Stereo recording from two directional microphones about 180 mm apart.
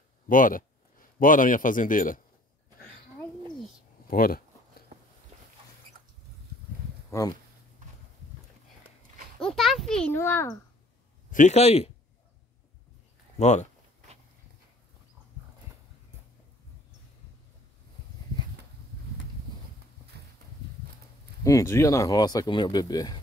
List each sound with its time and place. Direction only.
0.3 s speech: 50° left (ahead or behind)
4.1 s speech: 50° left (ahead or behind)
7.1 s speech: 20° left (ahead or behind)
9.4 s a sound: centre (ahead or behind)
11.2 s speech: 45° left (ahead or behind)
13.4 s speech: 40° left (ahead or behind)
21.5 s speech: 15° left (ahead or behind)